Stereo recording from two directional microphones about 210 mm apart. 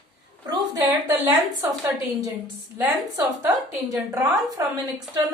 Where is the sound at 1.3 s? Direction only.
10° right (ahead or behind).